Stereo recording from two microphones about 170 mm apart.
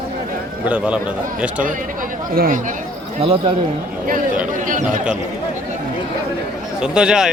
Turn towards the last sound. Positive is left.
turn(degrees=-5)  # may be behind; listen again after turning